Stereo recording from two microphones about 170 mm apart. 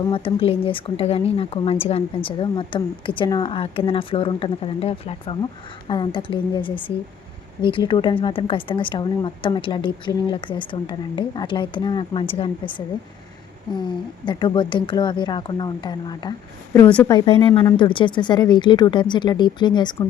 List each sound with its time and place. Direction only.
0.0 s a woman's voice: 30° left (ahead or behind)
14.3 s a woman's voice: 30° left (ahead or behind)
16.7 s speech: 10° left (ahead or behind)
17.4 s a woman's voice: 30° left (ahead or behind)